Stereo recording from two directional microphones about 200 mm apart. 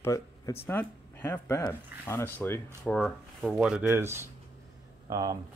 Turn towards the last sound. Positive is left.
turn(degrees=-20)  # may be behind; listen again after turning